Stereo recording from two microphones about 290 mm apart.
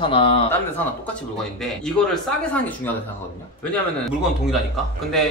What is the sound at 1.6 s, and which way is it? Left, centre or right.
Speech, centre.